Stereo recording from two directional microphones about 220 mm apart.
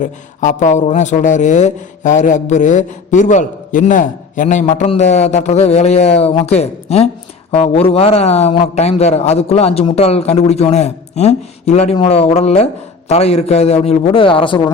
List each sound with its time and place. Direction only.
0.0 s a man's voice: 35° left (ahead or behind)